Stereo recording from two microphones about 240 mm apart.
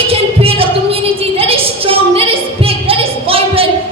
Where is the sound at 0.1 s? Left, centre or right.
Right.